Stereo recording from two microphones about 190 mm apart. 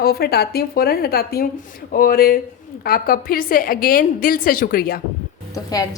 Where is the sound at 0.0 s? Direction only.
55° left (ahead or behind).